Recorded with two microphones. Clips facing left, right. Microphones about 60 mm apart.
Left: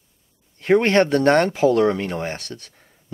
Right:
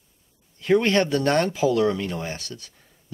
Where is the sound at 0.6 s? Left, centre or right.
Left.